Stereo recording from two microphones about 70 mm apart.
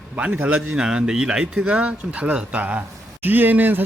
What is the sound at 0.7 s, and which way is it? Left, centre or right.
Speech, centre.